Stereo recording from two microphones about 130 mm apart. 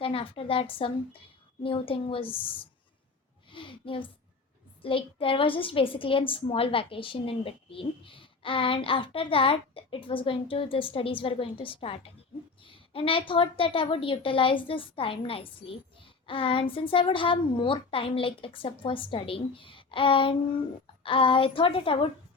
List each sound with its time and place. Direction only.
0.0 s a woman's voice: 45° left (ahead or behind)
3.5 s a woman's voice: 40° left (ahead or behind)
16.2 s a sound: 45° left (ahead or behind)
16.7 s a woman's voice: 40° left (ahead or behind)